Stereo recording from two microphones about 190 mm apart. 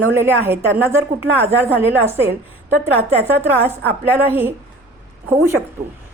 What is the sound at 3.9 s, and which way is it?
A woman's voice, 10° right (ahead or behind).